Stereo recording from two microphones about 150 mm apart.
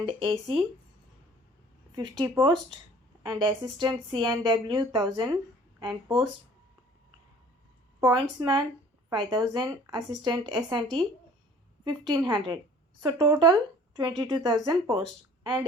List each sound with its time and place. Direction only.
0.0 s a woman's voice: 35° right (ahead or behind)
2.0 s a woman's voice: 30° right (ahead or behind)
8.0 s a woman's voice: 30° right (ahead or behind)
11.9 s speech: 30° right (ahead or behind)